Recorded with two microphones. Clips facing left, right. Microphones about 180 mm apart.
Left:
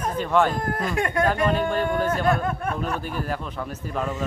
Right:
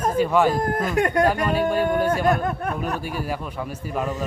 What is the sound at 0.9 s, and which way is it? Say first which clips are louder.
Speech: right 4 dB; 40° right (ahead or behind).